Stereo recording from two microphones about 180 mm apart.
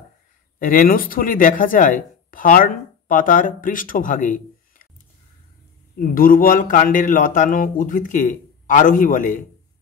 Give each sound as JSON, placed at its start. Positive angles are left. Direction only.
{"t": 0.6, "sound": "speech", "side_deg": 50}
{"t": 5.9, "sound": "speech", "side_deg": 50}